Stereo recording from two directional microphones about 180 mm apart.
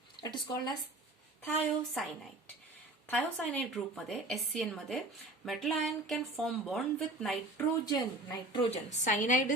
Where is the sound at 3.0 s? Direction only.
10° left (ahead or behind).